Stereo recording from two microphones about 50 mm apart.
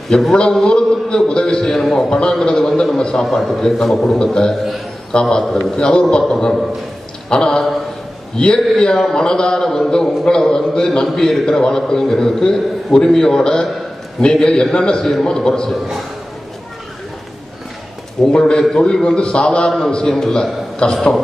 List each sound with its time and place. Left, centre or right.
0.1 s a man's voice: centre
2.7 s a man's voice: centre
4.2 s a man's voice: centre
5.5 s a man's voice: centre
6.3 s a man's voice: centre
18.2 s a man's voice: centre
19.1 s a man's voice: centre